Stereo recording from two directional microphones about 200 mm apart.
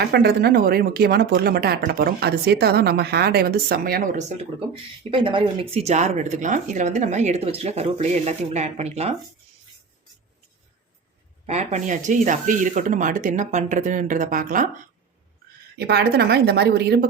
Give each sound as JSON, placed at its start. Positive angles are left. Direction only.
{"t": 0.0, "sound": "speech", "side_deg": -55}
{"t": 5.1, "sound": "speech", "side_deg": -25}
{"t": 11.4, "sound": "speech", "side_deg": -35}
{"t": 15.8, "sound": "speech", "side_deg": -55}